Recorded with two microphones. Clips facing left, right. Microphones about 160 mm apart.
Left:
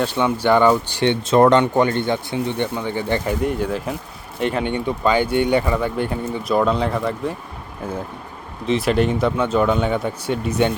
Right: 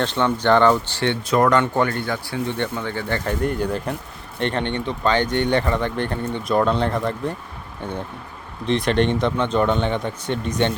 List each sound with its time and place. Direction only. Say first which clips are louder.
0.0 s speech: left 1 dB; 10° left (ahead or behind)
3.4 s speech: left 1 dB; centre (ahead or behind)